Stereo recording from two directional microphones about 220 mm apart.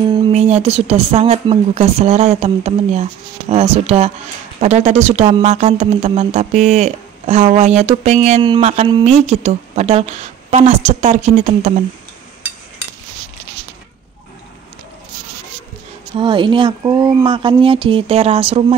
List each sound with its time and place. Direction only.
0.3 s speech: 30° right (ahead or behind)
16.2 s speech: 20° right (ahead or behind)